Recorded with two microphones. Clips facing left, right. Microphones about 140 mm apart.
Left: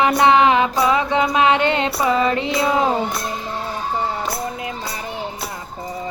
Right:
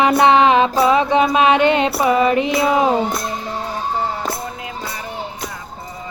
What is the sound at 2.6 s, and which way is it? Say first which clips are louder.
Speech: right 1 dB; 20° right (ahead or behind).